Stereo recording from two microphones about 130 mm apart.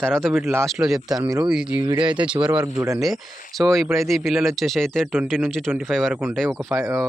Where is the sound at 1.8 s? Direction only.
35° right (ahead or behind).